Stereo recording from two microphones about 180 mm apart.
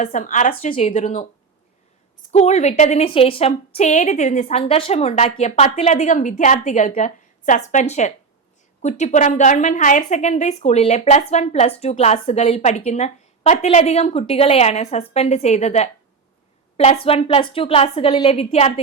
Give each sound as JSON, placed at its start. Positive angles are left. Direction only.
{"t": 0.0, "sound": "a woman's voice", "side_deg": 45}
{"t": 2.3, "sound": "a woman's voice", "side_deg": 40}